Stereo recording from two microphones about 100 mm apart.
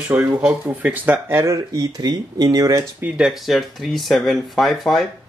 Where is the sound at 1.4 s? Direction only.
30° right (ahead or behind).